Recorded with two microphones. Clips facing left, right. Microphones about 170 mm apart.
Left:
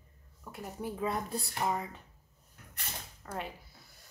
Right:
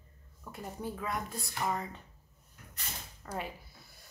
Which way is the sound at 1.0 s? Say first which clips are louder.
Left 7 dB; 30° left (ahead or behind).